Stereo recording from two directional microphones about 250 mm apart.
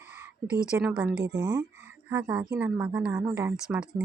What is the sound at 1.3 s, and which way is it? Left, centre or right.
A woman's voice, centre.